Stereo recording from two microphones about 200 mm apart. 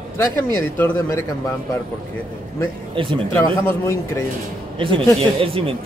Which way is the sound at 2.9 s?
25° right (ahead or behind).